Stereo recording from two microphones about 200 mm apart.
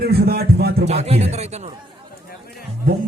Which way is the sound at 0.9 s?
30° right (ahead or behind).